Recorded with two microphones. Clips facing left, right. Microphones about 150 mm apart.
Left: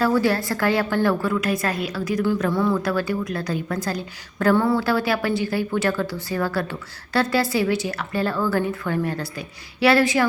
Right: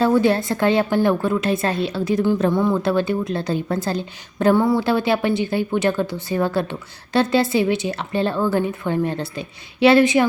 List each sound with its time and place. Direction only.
0.0 s a woman's voice: 20° right (ahead or behind)